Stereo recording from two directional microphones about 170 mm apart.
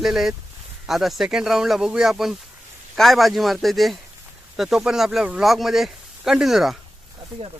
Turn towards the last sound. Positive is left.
turn(degrees=0)  # may be behind; listen again after turning